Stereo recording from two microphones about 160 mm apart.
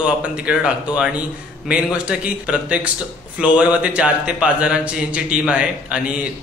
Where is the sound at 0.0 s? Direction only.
5° right (ahead or behind).